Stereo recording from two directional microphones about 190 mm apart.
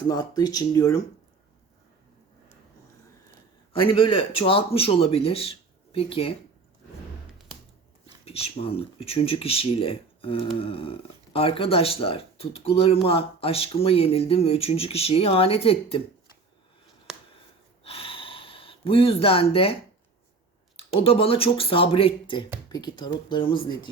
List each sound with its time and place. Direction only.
0.1 s speech: 20° left (ahead or behind)
3.7 s speech: 30° left (ahead or behind)
8.2 s speech: 30° left (ahead or behind)
17.1 s a sound: centre (ahead or behind)
17.8 s a sound: 30° left (ahead or behind)
20.7 s speech: 30° left (ahead or behind)